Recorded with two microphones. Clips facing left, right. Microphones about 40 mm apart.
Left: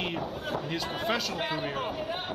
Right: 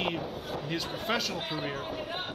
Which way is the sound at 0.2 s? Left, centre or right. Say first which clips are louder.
Left 3 dB; left.